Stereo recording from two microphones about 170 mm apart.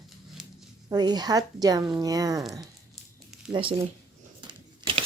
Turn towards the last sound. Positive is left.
turn(degrees=-30)  # may be behind; listen again after turning